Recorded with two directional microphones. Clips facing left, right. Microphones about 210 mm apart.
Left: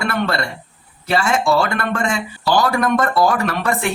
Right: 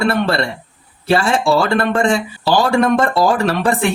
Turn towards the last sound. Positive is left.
turn(degrees=-30)  # may be behind; listen again after turning